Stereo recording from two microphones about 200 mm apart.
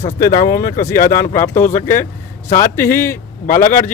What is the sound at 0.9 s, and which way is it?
Speech, 45° left (ahead or behind).